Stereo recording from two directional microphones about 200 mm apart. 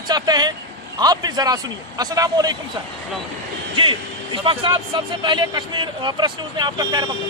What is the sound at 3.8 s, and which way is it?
A man's voice, 25° right (ahead or behind).